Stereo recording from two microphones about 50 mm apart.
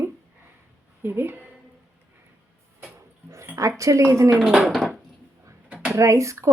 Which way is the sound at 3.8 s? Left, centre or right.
Right.